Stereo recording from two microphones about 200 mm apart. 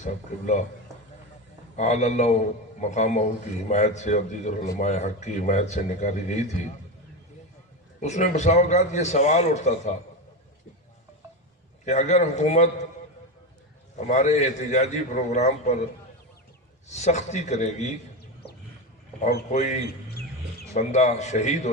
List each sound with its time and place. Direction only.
1.8 s a man's voice: 35° left (ahead or behind)
8.0 s a man's voice: 35° left (ahead or behind)
11.8 s a man's voice: 35° left (ahead or behind)
13.9 s a man's voice: 35° left (ahead or behind)
16.9 s a man's voice: 35° left (ahead or behind)
19.2 s a man's voice: 40° left (ahead or behind)
20.1 s music: 55° left (ahead or behind)
20.7 s a man's voice: 35° left (ahead or behind)